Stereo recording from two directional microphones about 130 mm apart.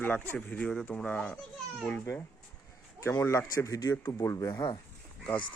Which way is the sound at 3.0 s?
20° left (ahead or behind).